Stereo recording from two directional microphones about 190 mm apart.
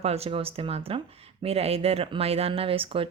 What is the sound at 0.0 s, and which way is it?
Speech, 35° right (ahead or behind).